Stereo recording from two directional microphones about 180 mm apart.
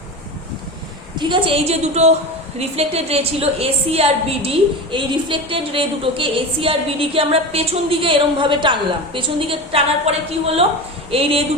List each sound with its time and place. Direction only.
1.2 s a woman's voice: 30° right (ahead or behind)